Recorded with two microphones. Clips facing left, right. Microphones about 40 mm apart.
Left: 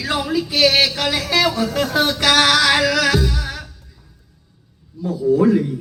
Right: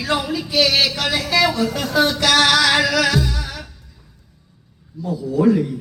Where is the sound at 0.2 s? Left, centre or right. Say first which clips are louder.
Left 2 dB; centre.